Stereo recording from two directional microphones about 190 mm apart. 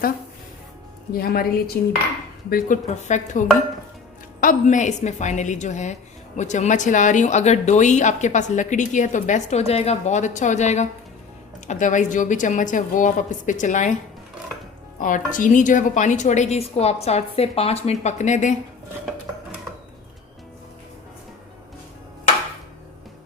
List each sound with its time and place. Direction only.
1.1 s a woman's voice: 50° left (ahead or behind)
14.9 s a woman's voice: 45° left (ahead or behind)